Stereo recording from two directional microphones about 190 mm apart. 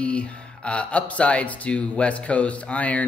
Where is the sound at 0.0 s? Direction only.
5° left (ahead or behind).